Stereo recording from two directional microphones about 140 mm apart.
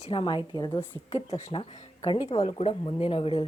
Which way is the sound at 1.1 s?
50° left (ahead or behind).